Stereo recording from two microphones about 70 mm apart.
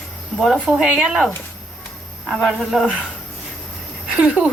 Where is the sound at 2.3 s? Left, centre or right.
Centre.